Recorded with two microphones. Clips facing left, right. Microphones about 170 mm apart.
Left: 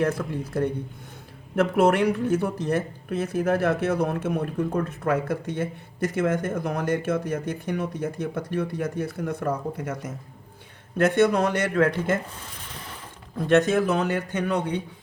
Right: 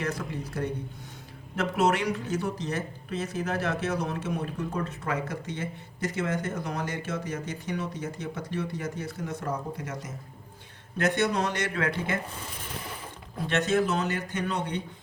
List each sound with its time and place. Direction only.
0.0 s speech: 55° left (ahead or behind)
13.5 s speech: 55° left (ahead or behind)